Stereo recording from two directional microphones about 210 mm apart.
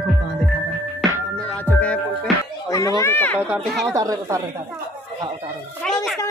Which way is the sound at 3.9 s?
15° right (ahead or behind).